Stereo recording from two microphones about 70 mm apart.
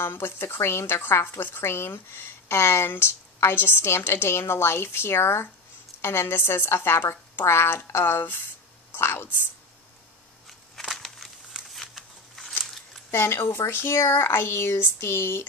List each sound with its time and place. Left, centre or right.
0.0 s speech: left
11.0 s a sound: centre
13.1 s speech: left